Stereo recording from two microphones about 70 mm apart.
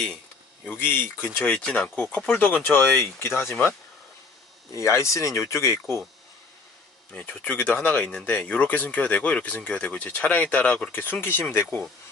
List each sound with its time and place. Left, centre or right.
0.7 s speech: left
1.5 s speech: centre
2.3 s speech: left
4.7 s speech: left
7.1 s speech: left